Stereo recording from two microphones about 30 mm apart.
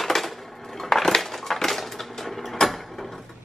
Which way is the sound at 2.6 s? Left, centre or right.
Centre.